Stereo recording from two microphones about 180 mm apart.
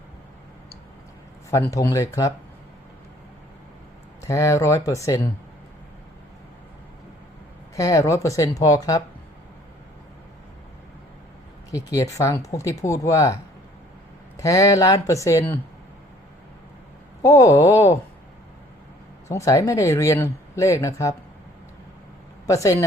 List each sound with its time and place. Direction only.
1.5 s speech: 15° left (ahead or behind)
4.2 s speech: 20° left (ahead or behind)
7.8 s speech: 15° left (ahead or behind)
11.7 s speech: 15° left (ahead or behind)
17.2 s speech: 20° left (ahead or behind)
19.3 s speech: 15° left (ahead or behind)
22.4 s speech: 20° left (ahead or behind)